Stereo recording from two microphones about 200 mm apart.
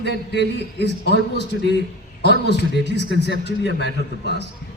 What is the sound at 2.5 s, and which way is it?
Speech, 60° right (ahead or behind).